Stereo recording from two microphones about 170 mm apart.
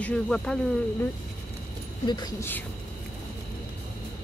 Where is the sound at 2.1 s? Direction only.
25° left (ahead or behind).